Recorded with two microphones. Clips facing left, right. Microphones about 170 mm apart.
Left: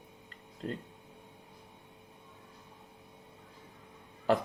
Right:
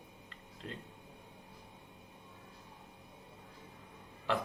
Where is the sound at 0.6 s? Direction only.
40° left (ahead or behind).